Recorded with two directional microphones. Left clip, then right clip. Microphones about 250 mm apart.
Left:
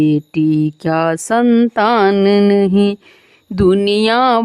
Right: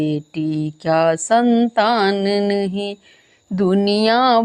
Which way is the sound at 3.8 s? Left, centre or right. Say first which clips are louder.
Left 3 dB; centre.